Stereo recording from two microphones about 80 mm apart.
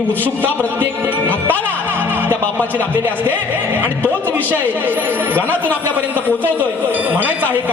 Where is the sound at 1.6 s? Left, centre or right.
Right.